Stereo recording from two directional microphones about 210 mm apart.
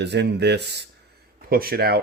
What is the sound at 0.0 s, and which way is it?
Speech, 55° right (ahead or behind).